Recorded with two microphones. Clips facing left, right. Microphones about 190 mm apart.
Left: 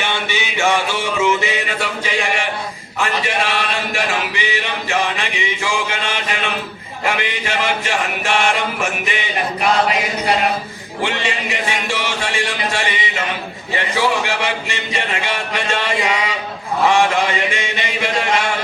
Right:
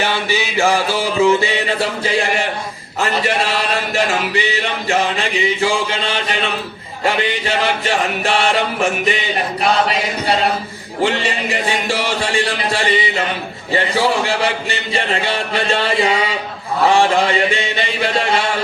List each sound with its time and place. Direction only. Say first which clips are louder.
0.1 s music: right 3 dB; 35° right (ahead or behind)
3.0 s a man's voice: right 2 dB; 35° right (ahead or behind)
5.5 s a man's voice: right 4 dB; 35° right (ahead or behind)
11.0 s a man's voice: right 4 dB; 35° right (ahead or behind)